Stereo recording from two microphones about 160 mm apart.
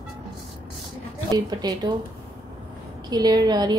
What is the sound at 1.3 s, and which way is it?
Speech, 25° right (ahead or behind).